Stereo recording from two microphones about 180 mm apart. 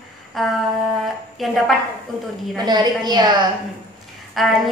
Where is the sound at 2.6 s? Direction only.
25° right (ahead or behind).